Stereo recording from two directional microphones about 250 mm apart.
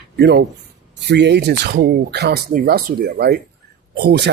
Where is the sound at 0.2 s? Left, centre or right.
Right.